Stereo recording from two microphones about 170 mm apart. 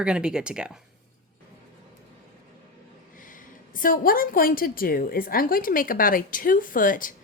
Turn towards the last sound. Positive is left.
turn(degrees=55)  # may be behind; listen again after turning